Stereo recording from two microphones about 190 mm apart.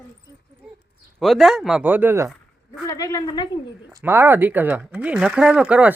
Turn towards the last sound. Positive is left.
turn(degrees=-5)  # may be behind; listen again after turning